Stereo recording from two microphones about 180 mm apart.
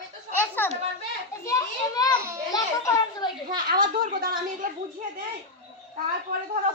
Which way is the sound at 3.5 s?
50° right (ahead or behind).